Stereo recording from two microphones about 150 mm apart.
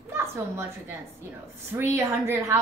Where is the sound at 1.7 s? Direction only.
15° right (ahead or behind).